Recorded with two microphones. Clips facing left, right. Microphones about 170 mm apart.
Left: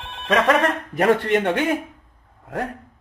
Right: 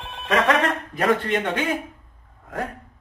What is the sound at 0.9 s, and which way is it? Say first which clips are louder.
Speech: left 4 dB; 65° left (ahead or behind).